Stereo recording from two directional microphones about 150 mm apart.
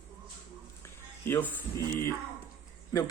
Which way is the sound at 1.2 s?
15° left (ahead or behind).